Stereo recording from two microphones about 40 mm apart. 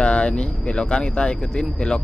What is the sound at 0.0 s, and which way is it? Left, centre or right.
Speech, left.